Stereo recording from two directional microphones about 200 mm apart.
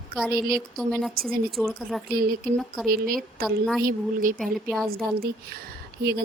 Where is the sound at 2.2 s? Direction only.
45° right (ahead or behind).